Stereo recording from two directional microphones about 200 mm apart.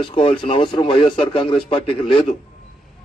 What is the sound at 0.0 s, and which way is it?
A man's voice, 25° left (ahead or behind).